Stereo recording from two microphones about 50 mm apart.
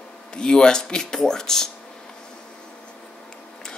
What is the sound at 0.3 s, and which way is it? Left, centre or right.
Speech, centre.